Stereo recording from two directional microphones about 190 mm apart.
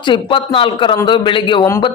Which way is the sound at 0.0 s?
25° left (ahead or behind).